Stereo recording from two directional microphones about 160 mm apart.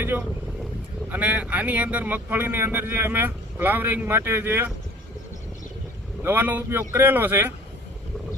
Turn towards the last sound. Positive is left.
turn(degrees=-15)  # may be behind; listen again after turning